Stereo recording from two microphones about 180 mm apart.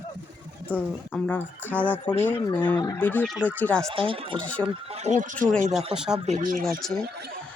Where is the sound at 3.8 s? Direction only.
30° right (ahead or behind).